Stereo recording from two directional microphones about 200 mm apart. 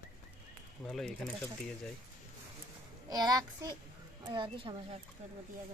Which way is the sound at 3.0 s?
20° right (ahead or behind).